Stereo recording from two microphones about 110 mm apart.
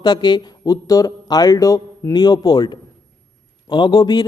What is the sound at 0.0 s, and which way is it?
A man's voice, 40° left (ahead or behind).